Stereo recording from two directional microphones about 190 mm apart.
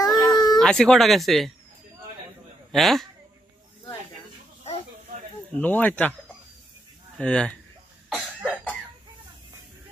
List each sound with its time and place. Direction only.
0.0 s baby cry: 20° left (ahead or behind)
0.6 s speech: 5° left (ahead or behind)
2.7 s speech: centre (ahead or behind)
5.6 s speech: 10° left (ahead or behind)
7.2 s speech: 5° left (ahead or behind)
8.1 s cough: 5° right (ahead or behind)